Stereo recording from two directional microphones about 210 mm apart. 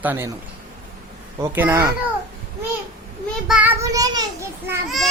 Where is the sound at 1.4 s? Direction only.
10° right (ahead or behind).